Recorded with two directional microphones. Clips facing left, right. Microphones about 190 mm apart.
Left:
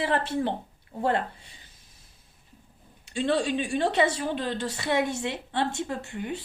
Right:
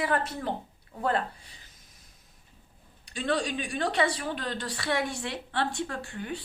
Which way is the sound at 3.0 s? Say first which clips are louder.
Left 4 dB; 25° left (ahead or behind).